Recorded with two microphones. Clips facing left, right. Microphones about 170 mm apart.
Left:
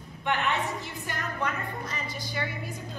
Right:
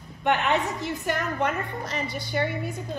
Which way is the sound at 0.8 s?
65° right (ahead or behind).